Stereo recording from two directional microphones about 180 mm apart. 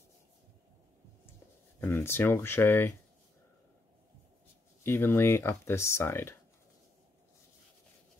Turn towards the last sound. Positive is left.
turn(degrees=15)  # may be behind; listen again after turning